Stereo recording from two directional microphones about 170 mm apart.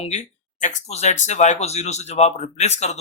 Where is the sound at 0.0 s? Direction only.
45° left (ahead or behind).